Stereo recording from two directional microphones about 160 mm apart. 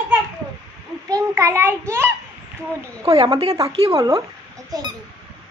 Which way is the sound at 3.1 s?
35° right (ahead or behind).